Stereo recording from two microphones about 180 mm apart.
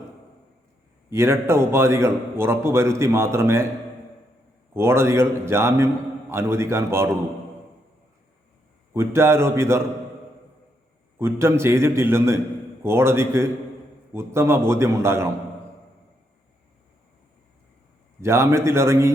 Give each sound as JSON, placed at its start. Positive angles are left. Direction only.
{"t": 1.1, "sound": "a man's voice", "side_deg": -15}
{"t": 4.7, "sound": "a man's voice", "side_deg": -15}
{"t": 8.9, "sound": "a man's voice", "side_deg": -15}
{"t": 11.2, "sound": "a man's voice", "side_deg": -15}
{"t": 18.2, "sound": "a man's voice", "side_deg": -15}